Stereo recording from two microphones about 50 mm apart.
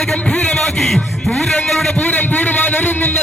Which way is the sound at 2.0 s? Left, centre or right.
Left.